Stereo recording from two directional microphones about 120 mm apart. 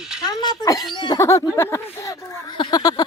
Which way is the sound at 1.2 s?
25° left (ahead or behind).